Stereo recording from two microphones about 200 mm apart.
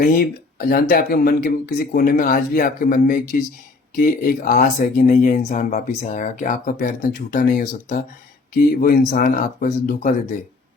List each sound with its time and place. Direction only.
0.0 s speech: 45° left (ahead or behind)